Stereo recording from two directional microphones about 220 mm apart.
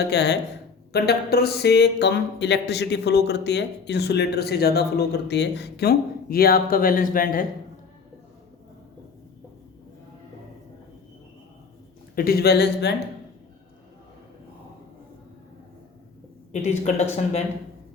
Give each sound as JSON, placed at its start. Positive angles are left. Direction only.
{"t": 0.0, "sound": "speech", "side_deg": 50}
{"t": 12.1, "sound": "speech", "side_deg": 45}
{"t": 16.5, "sound": "a woman's voice", "side_deg": 30}